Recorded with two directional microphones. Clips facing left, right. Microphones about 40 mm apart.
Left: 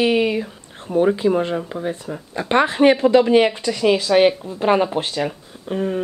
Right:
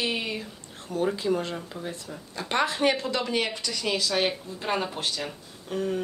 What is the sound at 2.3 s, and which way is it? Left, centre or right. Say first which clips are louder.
Speech: left 9 dB; left.